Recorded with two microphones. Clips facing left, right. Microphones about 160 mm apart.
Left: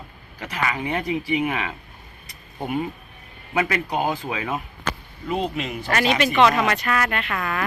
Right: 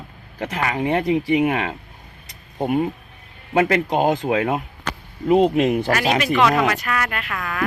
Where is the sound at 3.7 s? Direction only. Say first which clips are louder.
Right 6 dB; 65° right (ahead or behind).